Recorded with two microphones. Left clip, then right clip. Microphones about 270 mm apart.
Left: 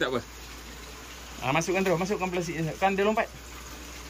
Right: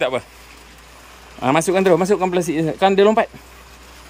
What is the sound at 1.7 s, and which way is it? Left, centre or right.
Speech, right.